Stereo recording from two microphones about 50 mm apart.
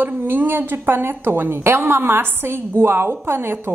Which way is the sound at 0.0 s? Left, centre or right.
Right.